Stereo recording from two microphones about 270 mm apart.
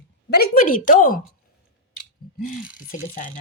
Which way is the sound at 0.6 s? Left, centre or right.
Left.